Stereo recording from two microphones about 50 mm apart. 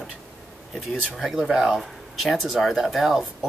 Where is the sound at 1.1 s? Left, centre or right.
Centre.